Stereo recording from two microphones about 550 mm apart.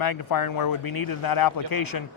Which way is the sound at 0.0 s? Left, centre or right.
Left.